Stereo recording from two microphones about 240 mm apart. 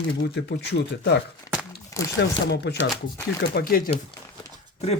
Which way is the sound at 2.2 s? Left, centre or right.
Left.